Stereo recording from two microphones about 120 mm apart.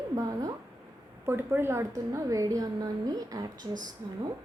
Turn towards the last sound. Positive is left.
turn(degrees=-35)  # may be behind; listen again after turning